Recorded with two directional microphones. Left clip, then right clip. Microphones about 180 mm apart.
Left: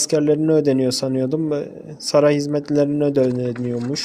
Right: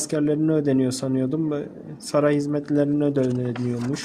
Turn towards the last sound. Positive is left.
turn(degrees=15)  # may be behind; listen again after turning